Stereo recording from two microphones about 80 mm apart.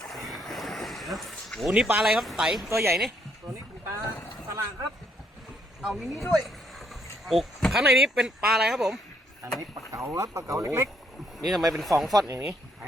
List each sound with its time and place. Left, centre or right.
0.1 s a sound: centre
1.6 s speech: centre
2.6 s speech: right
3.5 s boat: right
4.4 s a sound: right
5.8 s speech: centre
6.3 s a sound: centre
7.7 s speech: centre
9.9 s speech: right
11.3 s speech: centre